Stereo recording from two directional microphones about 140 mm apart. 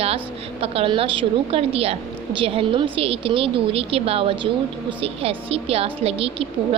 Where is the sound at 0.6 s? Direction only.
45° right (ahead or behind).